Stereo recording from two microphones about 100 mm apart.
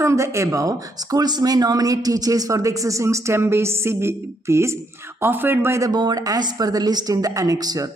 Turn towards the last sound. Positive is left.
turn(degrees=-40)  # may be behind; listen again after turning